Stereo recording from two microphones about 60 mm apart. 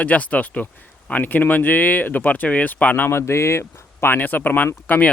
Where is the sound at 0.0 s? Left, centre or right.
Left.